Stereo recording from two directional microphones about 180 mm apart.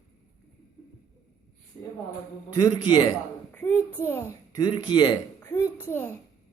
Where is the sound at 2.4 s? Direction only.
25° left (ahead or behind).